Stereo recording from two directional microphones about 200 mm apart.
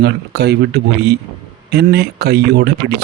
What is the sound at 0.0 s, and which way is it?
Speech, 55° right (ahead or behind).